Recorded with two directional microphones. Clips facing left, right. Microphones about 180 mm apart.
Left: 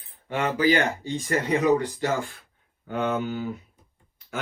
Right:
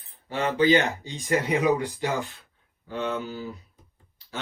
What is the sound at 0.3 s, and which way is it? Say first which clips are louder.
Speech: right 1 dB; 25° right (ahead or behind).